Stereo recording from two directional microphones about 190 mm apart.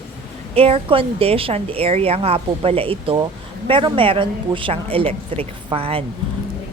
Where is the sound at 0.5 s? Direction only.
30° right (ahead or behind).